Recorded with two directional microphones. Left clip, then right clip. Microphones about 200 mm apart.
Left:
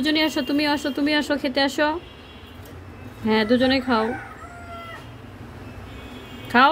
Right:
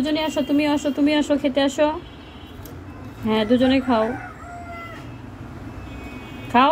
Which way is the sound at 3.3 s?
25° left (ahead or behind).